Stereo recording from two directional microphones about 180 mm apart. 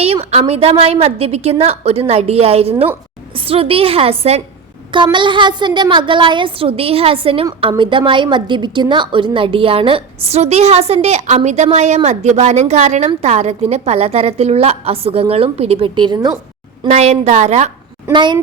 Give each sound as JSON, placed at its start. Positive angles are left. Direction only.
{"t": 0.0, "sound": "a woman's voice", "side_deg": -35}
{"t": 16.8, "sound": "a woman's voice", "side_deg": -35}
{"t": 18.1, "sound": "a woman's voice", "side_deg": -25}